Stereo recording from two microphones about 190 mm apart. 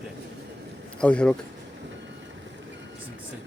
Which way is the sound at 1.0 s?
5° left (ahead or behind).